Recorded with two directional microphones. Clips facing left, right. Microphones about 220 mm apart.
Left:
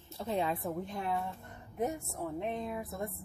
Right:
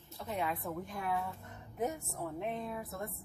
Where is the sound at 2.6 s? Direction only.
15° left (ahead or behind).